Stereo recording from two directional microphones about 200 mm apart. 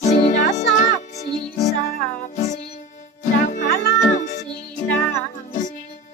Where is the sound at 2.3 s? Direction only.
35° left (ahead or behind).